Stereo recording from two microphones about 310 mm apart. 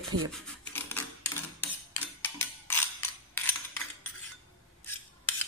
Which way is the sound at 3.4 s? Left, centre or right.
Centre.